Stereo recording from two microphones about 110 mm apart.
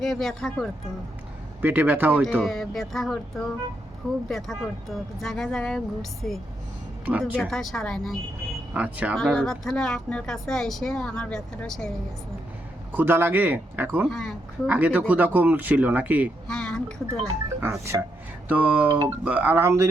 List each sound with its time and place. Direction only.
0.0 s speech: centre (ahead or behind)
1.6 s speech: 20° right (ahead or behind)
2.4 s speech: 5° left (ahead or behind)
7.0 s speech: 15° right (ahead or behind)
7.4 s speech: centre (ahead or behind)
8.7 s speech: 15° right (ahead or behind)
9.1 s speech: 5° left (ahead or behind)
12.9 s speech: 20° right (ahead or behind)
14.1 s speech: 5° left (ahead or behind)
14.7 s speech: 15° right (ahead or behind)
16.5 s speech: 5° left (ahead or behind)
17.6 s speech: 25° right (ahead or behind)